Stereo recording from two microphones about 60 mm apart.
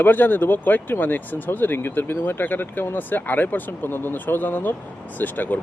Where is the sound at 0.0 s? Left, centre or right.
Left.